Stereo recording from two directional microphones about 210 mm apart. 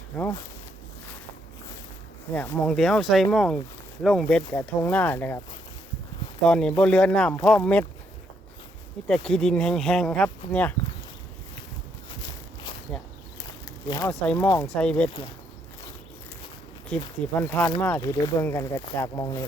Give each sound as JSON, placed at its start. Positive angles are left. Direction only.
{"t": 0.2, "sound": "speech", "side_deg": 15}
{"t": 2.3, "sound": "speech", "side_deg": 10}
{"t": 6.4, "sound": "speech", "side_deg": 5}
{"t": 9.0, "sound": "speech", "side_deg": 5}
{"t": 12.9, "sound": "a sound", "side_deg": 5}
{"t": 13.8, "sound": "speech", "side_deg": 20}
{"t": 14.1, "sound": "speech", "side_deg": 5}
{"t": 17.3, "sound": "speech", "side_deg": 5}